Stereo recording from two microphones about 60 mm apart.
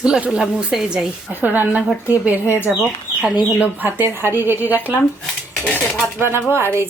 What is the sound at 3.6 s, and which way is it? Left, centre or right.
A woman's voice, right.